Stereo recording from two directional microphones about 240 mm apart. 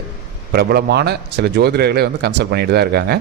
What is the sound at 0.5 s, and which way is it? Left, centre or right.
A man's voice, right.